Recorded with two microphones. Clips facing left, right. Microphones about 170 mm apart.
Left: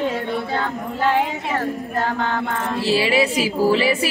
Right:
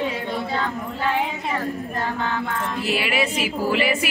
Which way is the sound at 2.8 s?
30° left (ahead or behind).